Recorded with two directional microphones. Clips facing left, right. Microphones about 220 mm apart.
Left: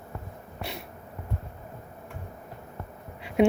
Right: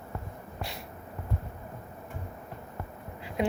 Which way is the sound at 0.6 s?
65° left (ahead or behind).